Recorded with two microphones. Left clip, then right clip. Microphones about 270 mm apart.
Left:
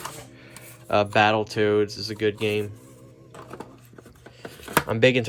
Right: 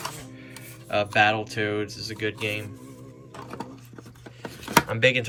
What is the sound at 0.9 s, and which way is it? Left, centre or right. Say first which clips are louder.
Speech: left 2 dB; centre.